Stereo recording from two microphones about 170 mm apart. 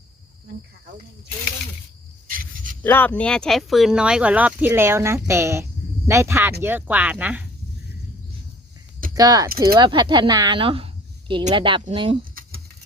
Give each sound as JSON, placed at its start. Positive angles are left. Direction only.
{"t": 2.2, "sound": "a sound", "side_deg": -55}
{"t": 2.8, "sound": "speech", "side_deg": 10}
{"t": 9.1, "sound": "speech", "side_deg": -20}
{"t": 9.5, "sound": "speech", "side_deg": -65}
{"t": 9.7, "sound": "speech", "side_deg": -30}
{"t": 12.3, "sound": "typing", "side_deg": -60}